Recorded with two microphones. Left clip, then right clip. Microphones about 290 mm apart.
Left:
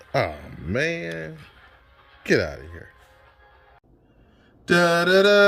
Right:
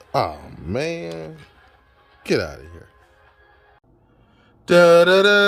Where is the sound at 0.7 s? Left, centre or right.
Right.